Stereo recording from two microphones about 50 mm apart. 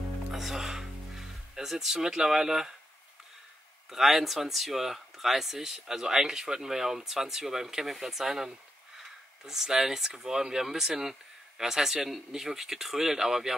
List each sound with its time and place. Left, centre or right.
0.3 s music: centre
3.9 s speech: centre